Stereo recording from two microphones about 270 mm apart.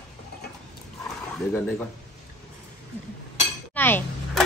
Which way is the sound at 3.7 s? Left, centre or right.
Centre.